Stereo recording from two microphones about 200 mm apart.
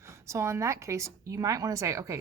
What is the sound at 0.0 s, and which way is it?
A woman's voice, 15° right (ahead or behind).